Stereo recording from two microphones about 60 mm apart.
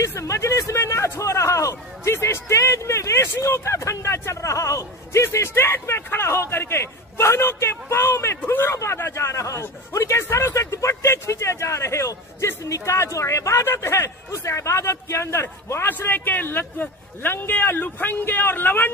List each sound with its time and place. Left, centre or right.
0.0 s speech: left
8.4 s a man's voice: left